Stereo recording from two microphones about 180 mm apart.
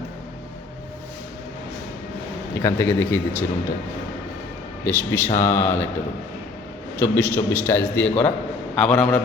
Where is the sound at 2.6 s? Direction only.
15° left (ahead or behind).